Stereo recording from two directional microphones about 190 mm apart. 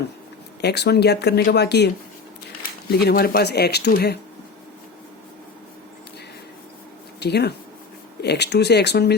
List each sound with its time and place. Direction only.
0.6 s speech: 60° left (ahead or behind)
3.0 s speech: 55° left (ahead or behind)
7.2 s speech: 60° left (ahead or behind)